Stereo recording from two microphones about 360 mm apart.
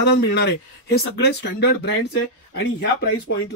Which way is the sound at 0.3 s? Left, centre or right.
Left.